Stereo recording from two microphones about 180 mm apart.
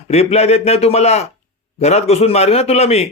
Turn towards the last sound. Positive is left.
turn(degrees=35)  # may be behind; listen again after turning